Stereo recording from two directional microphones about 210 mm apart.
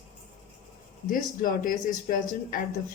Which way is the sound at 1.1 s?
40° left (ahead or behind).